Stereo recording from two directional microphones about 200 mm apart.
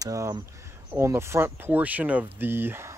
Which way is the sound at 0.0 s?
15° right (ahead or behind).